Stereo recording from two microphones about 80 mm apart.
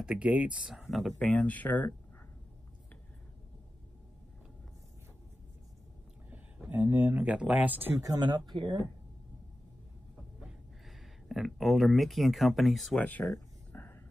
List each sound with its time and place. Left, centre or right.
0.0 s speech: centre
0.8 s speech: centre
1.2 s speech: centre
6.3 s speech: right
8.0 s speech: right
10.4 s speech: centre
13.0 s speech: centre
13.7 s a sound: left